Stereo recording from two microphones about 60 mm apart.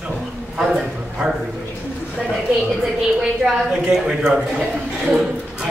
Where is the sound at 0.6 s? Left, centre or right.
Centre.